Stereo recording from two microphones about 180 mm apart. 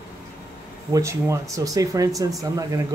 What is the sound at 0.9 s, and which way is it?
Speech, 15° right (ahead or behind).